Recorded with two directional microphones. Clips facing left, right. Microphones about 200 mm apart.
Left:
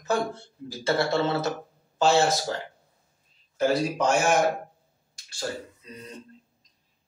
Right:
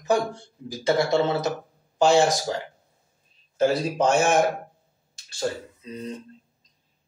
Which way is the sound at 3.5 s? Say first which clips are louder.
Right 2 dB; 25° right (ahead or behind).